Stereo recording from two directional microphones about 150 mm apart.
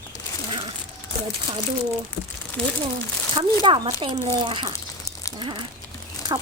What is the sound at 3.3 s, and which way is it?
Speech, 35° right (ahead or behind).